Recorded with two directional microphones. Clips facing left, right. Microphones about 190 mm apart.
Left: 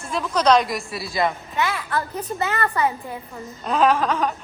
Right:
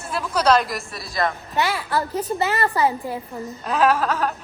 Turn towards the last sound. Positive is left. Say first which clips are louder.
# even
turn(degrees=-5)  # may be behind; listen again after turning